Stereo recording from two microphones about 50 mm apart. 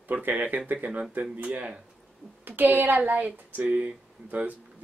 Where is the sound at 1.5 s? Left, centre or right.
Right.